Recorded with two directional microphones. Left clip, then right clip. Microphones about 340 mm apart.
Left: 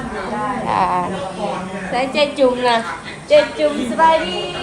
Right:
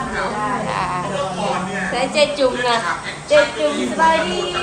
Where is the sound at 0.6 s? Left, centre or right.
Centre.